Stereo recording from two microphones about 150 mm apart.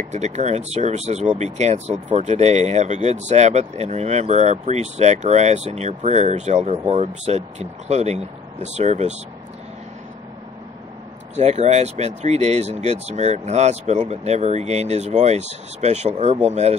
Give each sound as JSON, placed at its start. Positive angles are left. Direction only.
{"t": 0.1, "sound": "speech", "side_deg": -50}
{"t": 11.3, "sound": "speech", "side_deg": -45}